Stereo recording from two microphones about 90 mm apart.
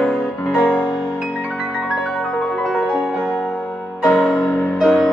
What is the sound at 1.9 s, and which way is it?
Music, centre (ahead or behind).